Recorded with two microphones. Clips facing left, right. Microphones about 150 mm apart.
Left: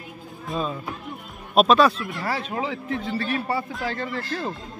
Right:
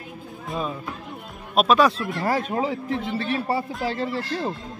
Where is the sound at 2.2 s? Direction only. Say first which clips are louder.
Right 4 dB; 45° right (ahead or behind).